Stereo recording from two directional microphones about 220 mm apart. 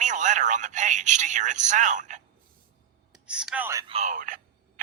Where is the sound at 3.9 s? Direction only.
30° right (ahead or behind).